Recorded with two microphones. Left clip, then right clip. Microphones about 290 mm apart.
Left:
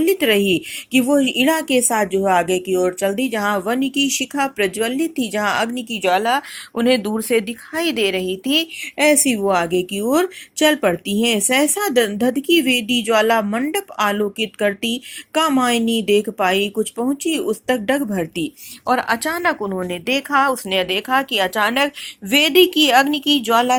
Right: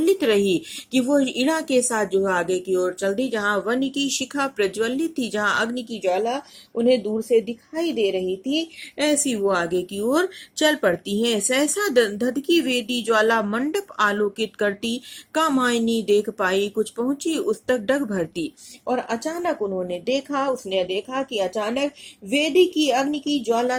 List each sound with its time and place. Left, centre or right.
0.0 s speech: centre
18.9 s speech: left